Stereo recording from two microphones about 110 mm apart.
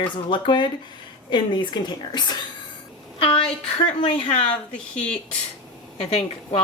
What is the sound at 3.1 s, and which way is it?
A woman's voice, 55° left (ahead or behind).